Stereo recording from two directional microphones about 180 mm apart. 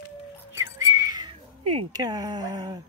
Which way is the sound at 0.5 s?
15° right (ahead or behind).